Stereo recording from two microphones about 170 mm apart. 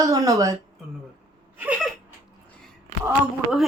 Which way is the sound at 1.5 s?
10° right (ahead or behind).